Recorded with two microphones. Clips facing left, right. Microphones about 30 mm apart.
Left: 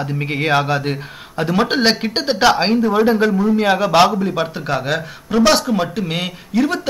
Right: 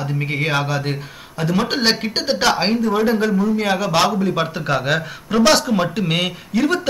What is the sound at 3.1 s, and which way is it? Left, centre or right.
A man's voice, left.